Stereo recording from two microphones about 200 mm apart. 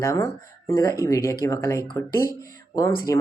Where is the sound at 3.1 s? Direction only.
15° left (ahead or behind).